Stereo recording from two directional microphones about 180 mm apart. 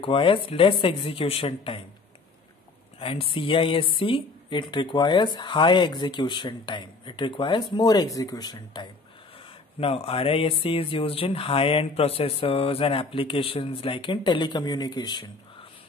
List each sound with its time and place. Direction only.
0.0 s speech: 30° left (ahead or behind)
3.0 s speech: 30° left (ahead or behind)
9.8 s speech: 30° left (ahead or behind)